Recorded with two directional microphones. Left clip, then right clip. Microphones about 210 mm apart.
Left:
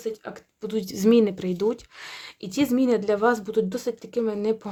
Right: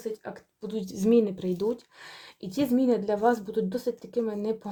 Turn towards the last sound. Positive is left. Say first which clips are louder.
# left 5 dB
turn(degrees=25)  # may be behind; listen again after turning